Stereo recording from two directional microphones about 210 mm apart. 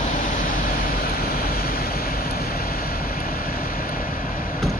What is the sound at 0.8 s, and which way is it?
Vehicle, 45° left (ahead or behind).